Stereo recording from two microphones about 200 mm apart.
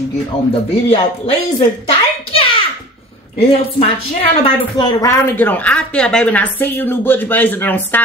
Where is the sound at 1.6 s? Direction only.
30° left (ahead or behind).